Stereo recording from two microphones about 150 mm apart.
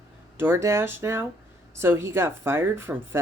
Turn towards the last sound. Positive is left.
turn(degrees=-15)  # may be behind; listen again after turning